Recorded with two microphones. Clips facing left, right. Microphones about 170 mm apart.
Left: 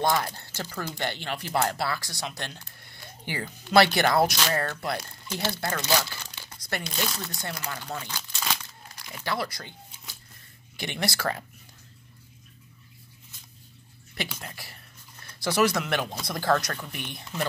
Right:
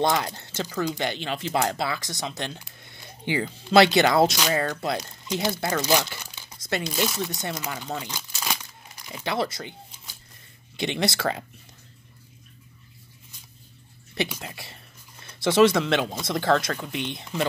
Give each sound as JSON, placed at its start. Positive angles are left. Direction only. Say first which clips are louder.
{"t": 0.0, "sound": "speech", "louder": "right 2 dB", "side_deg": -20}
{"t": 10.8, "sound": "speech", "louder": "right 5 dB", "side_deg": -20}
{"t": 14.1, "sound": "speech", "louder": "right 6 dB", "side_deg": -20}